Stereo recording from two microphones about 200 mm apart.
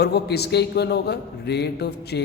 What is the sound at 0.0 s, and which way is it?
A man's voice, 55° left (ahead or behind).